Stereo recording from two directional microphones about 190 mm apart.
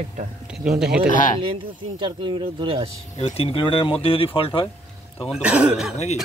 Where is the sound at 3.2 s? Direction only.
30° left (ahead or behind).